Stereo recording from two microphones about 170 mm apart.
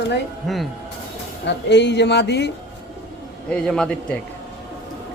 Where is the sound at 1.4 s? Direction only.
90° left.